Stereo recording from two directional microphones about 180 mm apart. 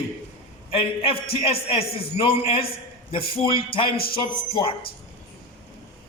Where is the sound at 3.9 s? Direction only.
55° left (ahead or behind).